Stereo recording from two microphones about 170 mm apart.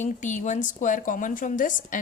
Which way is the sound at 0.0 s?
45° left (ahead or behind).